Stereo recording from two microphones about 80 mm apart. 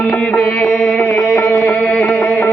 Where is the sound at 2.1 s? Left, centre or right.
Centre.